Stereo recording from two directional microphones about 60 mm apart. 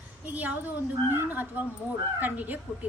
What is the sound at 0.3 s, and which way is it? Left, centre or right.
A woman's voice, right.